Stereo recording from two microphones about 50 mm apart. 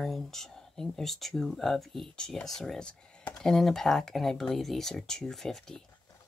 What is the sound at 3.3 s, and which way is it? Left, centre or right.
Speech, centre.